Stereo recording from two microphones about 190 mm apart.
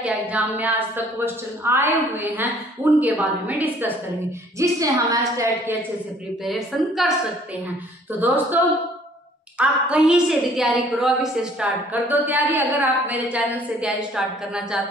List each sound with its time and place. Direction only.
0.0 s a woman's voice: 10° right (ahead or behind)
6.4 s a woman's voice: centre (ahead or behind)
8.1 s a woman's voice: 10° right (ahead or behind)